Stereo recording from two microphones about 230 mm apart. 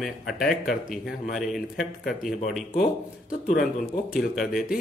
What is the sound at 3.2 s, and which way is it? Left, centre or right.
Speech, left.